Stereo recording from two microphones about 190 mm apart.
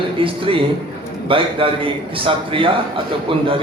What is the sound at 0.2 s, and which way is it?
A man's voice, 25° right (ahead or behind).